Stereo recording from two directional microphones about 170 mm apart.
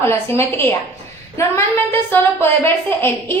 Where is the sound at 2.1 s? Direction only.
15° left (ahead or behind).